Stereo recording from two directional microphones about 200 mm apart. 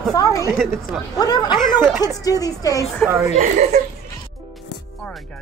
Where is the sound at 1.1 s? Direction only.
20° left (ahead or behind).